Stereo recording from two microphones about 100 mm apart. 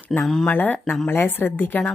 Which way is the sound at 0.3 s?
5° left (ahead or behind).